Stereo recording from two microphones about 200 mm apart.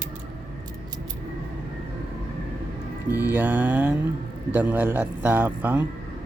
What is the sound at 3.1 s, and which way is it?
A man's voice, 10° right (ahead or behind).